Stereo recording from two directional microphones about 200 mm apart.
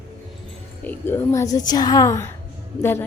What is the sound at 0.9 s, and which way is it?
A woman's voice, 10° left (ahead or behind).